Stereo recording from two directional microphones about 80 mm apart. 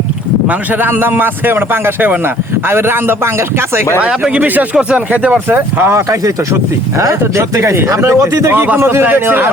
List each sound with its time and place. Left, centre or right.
0.4 s a man's voice: right
4.0 s a man's voice: centre
6.1 s speech: right
8.5 s a man's voice: right